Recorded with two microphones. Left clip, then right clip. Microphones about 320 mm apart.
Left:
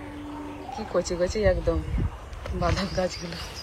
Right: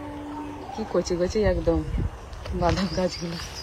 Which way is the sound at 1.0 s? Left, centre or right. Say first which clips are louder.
Right 1 dB; right.